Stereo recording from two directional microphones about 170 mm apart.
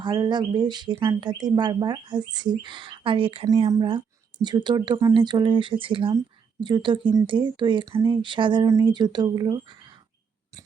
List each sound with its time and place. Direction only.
0.0 s speech: 25° right (ahead or behind)